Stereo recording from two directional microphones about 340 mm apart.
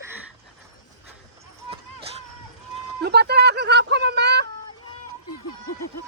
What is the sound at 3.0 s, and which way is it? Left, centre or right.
Speech, right.